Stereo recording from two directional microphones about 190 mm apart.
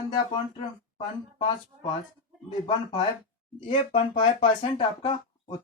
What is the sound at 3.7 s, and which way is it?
Speech, 25° left (ahead or behind).